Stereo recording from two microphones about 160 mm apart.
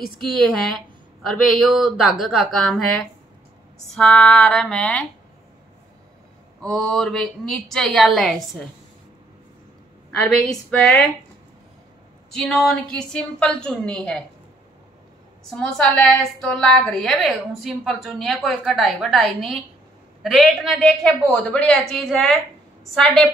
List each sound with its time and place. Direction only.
0.4 s a woman's voice: centre (ahead or behind)
6.6 s a woman's voice: centre (ahead or behind)
10.1 s a woman's voice: 5° left (ahead or behind)
12.3 s a woman's voice: 5° left (ahead or behind)
15.5 s a woman's voice: 5° left (ahead or behind)